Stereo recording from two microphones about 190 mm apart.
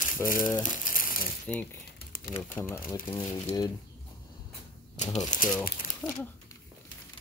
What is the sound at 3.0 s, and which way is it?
Speech, 25° left (ahead or behind).